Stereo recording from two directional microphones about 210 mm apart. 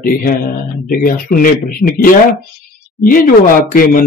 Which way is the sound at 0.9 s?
45° left (ahead or behind).